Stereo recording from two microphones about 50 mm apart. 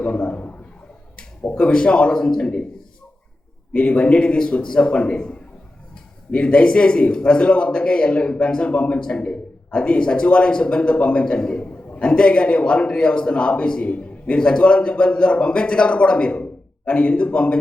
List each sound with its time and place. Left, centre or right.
0.0 s a sound: left
1.5 s a man's voice: centre
3.7 s a man's voice: left